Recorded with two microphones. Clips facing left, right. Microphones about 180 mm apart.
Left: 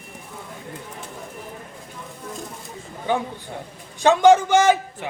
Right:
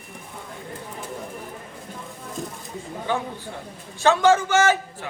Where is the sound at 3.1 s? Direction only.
15° left (ahead or behind).